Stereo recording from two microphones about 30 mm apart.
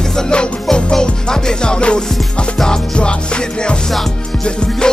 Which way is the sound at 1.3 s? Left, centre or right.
Left.